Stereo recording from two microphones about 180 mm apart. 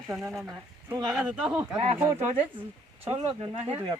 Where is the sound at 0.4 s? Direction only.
20° right (ahead or behind).